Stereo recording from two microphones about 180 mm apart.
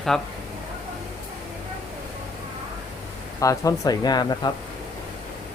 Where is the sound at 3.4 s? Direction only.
20° left (ahead or behind).